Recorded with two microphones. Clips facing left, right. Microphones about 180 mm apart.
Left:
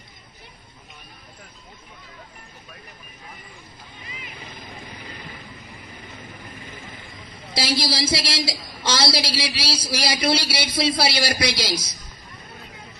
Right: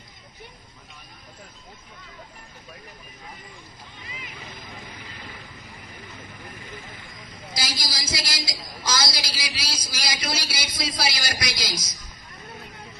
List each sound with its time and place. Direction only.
7.1 s a man's voice: 30° left (ahead or behind)